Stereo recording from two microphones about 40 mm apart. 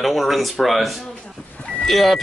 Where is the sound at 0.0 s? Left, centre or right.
Centre.